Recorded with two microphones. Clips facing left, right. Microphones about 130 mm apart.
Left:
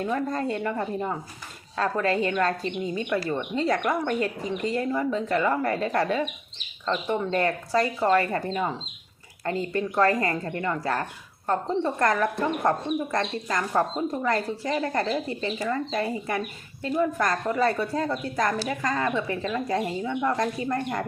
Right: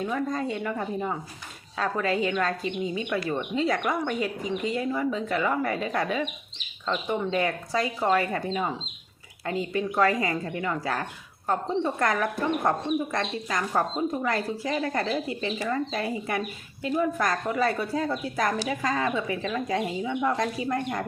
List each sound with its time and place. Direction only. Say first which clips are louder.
0.0 s speech: left 1 dB; centre (ahead or behind)
2.8 s speech: left 1 dB; 45° left (ahead or behind)
3.6 s speech: left 2 dB; centre (ahead or behind)
9.4 s speech: left 1 dB; 5° right (ahead or behind)